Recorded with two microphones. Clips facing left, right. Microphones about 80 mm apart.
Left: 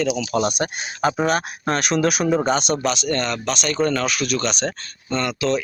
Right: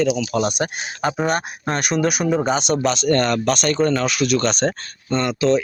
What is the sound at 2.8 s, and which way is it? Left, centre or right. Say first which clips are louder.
Speech: right 4 dB; right.